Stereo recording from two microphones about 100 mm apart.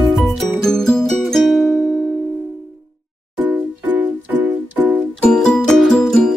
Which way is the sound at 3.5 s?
15° right (ahead or behind).